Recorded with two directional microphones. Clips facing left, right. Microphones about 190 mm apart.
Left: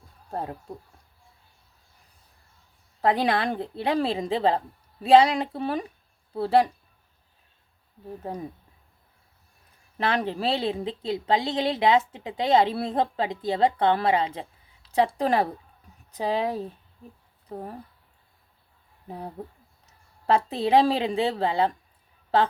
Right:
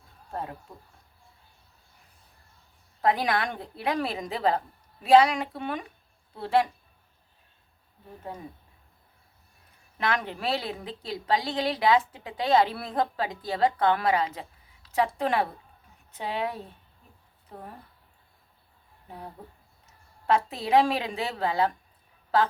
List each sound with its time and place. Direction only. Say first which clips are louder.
0.3 s speech: left 3 dB; 35° left (ahead or behind)
3.0 s a woman's voice: left 2 dB; 30° left (ahead or behind)
10.0 s a woman's voice: left 4 dB; 30° left (ahead or behind)
19.0 s a woman's voice: left 6 dB; 35° left (ahead or behind)